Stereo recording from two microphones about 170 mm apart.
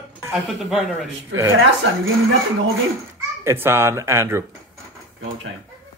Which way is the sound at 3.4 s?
15° right (ahead or behind).